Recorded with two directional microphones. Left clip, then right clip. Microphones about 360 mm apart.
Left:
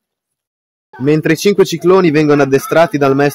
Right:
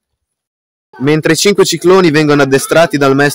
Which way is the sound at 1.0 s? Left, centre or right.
Right.